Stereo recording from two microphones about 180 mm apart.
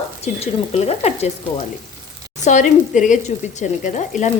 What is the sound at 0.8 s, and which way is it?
Speech, 35° left (ahead or behind).